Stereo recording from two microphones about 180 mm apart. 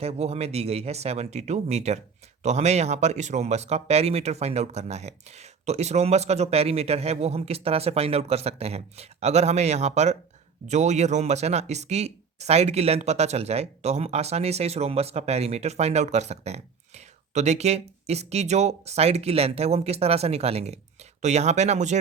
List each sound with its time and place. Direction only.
0.0 s speech: 35° right (ahead or behind)